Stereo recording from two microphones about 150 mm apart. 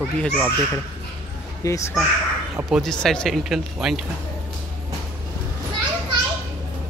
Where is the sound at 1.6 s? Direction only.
25° left (ahead or behind).